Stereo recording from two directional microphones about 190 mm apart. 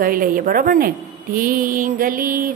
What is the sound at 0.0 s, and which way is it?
A woman's voice, 45° right (ahead or behind).